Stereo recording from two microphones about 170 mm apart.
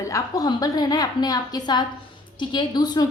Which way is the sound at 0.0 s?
20° left (ahead or behind).